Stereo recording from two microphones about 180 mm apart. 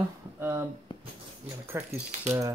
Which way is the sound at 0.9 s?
25° left (ahead or behind).